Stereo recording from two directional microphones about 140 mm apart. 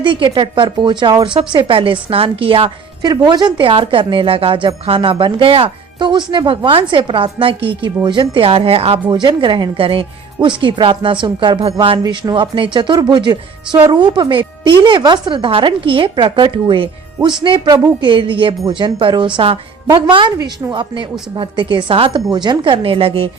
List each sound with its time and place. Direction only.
0.0 s a woman's voice: 35° right (ahead or behind)
9.0 s a woman's voice: 30° right (ahead or behind)